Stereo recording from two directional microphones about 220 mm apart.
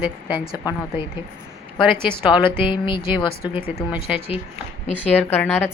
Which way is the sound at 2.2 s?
20° left (ahead or behind).